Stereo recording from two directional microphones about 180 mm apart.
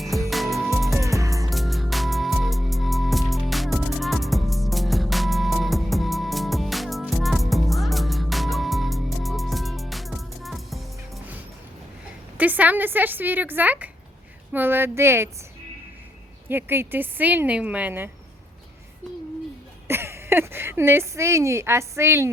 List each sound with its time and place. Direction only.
0.0 s music: centre (ahead or behind)
0.9 s music: 15° right (ahead or behind)
1.5 s music: centre (ahead or behind)
12.4 s speech: 10° right (ahead or behind)
16.5 s speech: 10° right (ahead or behind)
19.9 s speech: 15° right (ahead or behind)